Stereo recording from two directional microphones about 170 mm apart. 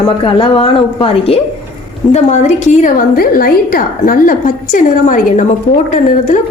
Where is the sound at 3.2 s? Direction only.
60° left (ahead or behind).